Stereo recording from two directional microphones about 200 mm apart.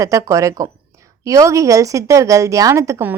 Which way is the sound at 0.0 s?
15° right (ahead or behind).